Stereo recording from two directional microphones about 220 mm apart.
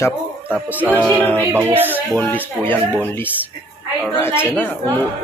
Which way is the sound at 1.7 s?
10° right (ahead or behind).